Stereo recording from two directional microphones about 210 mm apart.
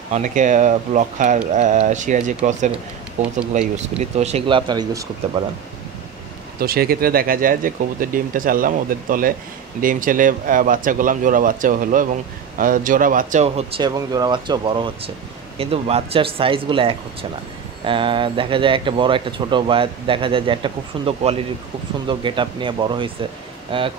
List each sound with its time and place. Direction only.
0.1 s speech: 35° right (ahead or behind); by 5.0 s 20° right (ahead or behind)
6.6 s speech: 45° right (ahead or behind)
13.8 s speech: 20° right (ahead or behind)